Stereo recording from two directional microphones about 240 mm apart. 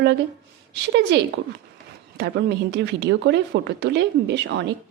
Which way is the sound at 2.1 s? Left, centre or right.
Right.